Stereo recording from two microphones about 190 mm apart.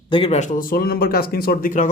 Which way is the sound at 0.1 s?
30° left (ahead or behind).